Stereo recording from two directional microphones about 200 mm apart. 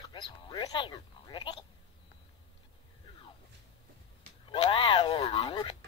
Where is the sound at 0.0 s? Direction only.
25° left (ahead or behind).